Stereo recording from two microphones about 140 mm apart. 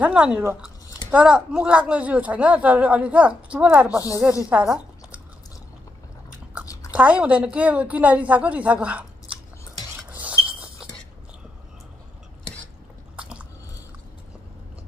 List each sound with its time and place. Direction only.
0.0 s speech: 5° right (ahead or behind)
3.9 s speech: 25° left (ahead or behind)
4.5 s speech: 10° right (ahead or behind)
6.9 s speech: 10° right (ahead or behind)
10.1 s a sound: 10° right (ahead or behind)
13.1 s biting: 10° right (ahead or behind)